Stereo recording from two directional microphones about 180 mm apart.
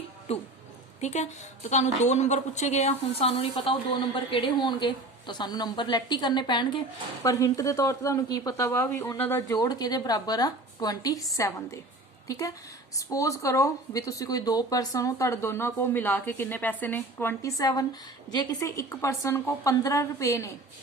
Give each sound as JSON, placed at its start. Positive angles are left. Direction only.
{"t": 0.3, "sound": "a woman's voice", "side_deg": 35}